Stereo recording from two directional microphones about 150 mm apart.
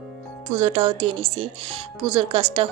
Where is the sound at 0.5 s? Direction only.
40° right (ahead or behind).